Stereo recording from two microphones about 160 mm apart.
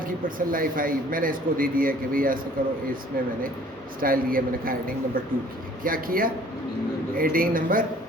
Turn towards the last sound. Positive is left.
turn(degrees=-60)  # may be behind; listen again after turning